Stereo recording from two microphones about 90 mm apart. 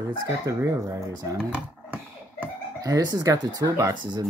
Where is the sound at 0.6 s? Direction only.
35° right (ahead or behind).